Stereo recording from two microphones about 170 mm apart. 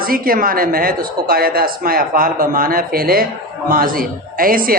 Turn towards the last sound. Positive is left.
turn(degrees=-55)  # may be behind; listen again after turning